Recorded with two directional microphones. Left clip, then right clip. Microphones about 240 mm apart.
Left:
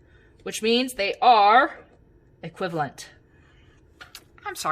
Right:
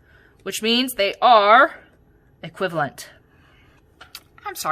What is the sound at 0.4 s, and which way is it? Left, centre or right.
Speech, right.